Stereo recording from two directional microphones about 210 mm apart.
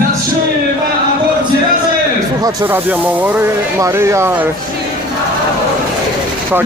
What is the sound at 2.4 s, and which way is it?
Speech, 15° right (ahead or behind).